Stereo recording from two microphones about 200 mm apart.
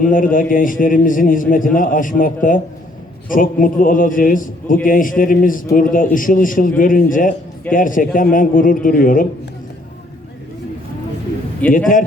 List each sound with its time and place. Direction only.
0.0 s a man's voice: 45° left (ahead or behind)
11.6 s a man's voice: 10° left (ahead or behind)